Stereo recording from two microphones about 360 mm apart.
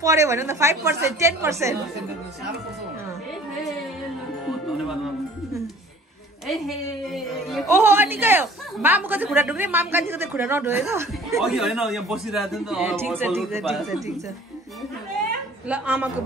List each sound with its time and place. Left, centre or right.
0.0 s a woman's voice: centre
6.4 s a woman's voice: centre
15.7 s a woman's voice: centre